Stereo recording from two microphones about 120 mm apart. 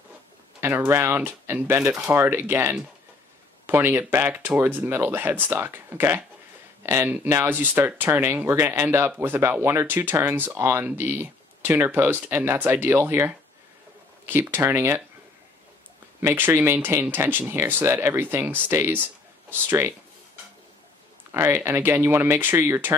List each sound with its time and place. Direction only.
0.6 s speech: 20° right (ahead or behind)
16.2 s speech: 20° right (ahead or behind)
21.3 s speech: 20° right (ahead or behind)